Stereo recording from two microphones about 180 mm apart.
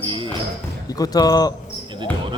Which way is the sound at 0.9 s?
20° left (ahead or behind).